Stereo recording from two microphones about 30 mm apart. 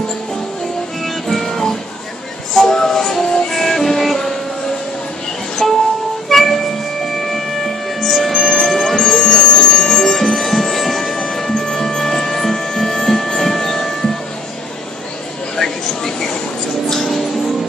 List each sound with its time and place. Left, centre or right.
1.0 s music: centre
5.6 s music: centre
15.5 s a sound: centre
16.9 s music: centre